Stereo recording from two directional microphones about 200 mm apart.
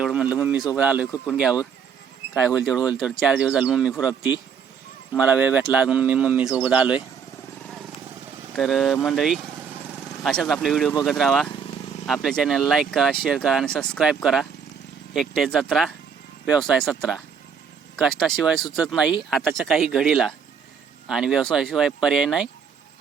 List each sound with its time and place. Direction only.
0.0 s speech: 5° right (ahead or behind)
1.0 s speech: 15° left (ahead or behind)
2.6 s speech: 5° right (ahead or behind)
8.5 s speech: centre (ahead or behind)
17.9 s speech: centre (ahead or behind)